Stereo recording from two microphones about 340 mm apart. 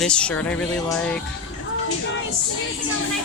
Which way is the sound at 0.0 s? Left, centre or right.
Centre.